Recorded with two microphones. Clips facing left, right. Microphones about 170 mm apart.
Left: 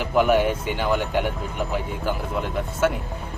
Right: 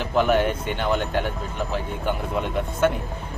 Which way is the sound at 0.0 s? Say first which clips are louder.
Left 1 dB; 10° left (ahead or behind).